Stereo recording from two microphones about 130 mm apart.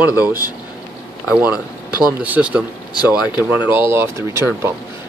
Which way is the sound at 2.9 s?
30° left (ahead or behind).